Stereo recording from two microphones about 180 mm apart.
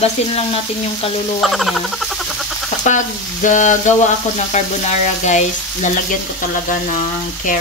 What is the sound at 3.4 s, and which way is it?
Speech, 45° left (ahead or behind).